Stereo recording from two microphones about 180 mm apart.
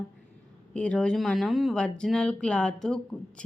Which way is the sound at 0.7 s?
5° left (ahead or behind).